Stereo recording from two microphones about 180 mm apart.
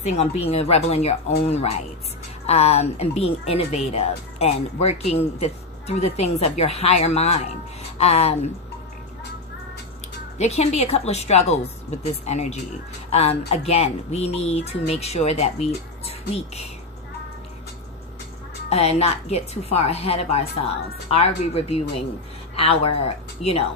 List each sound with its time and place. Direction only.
0.0 s speech: 40° left (ahead or behind)
10.3 s speech: 40° left (ahead or behind)
18.7 s speech: 35° left (ahead or behind)